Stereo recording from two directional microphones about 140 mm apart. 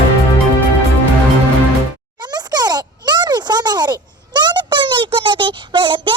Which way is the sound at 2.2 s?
30° right (ahead or behind).